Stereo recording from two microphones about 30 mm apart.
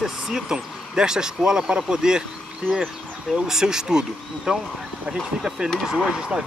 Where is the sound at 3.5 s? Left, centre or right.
Right.